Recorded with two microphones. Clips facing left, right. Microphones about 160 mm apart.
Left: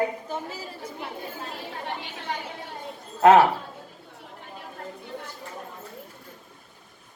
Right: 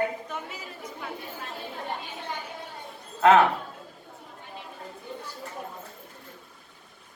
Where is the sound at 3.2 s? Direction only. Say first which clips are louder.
Left 3 dB; 30° left (ahead or behind).